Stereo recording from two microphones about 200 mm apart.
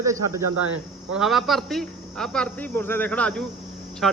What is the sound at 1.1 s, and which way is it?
Speech, centre (ahead or behind).